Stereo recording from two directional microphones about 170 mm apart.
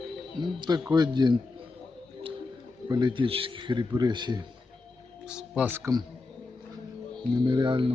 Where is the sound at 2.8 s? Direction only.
25° right (ahead or behind).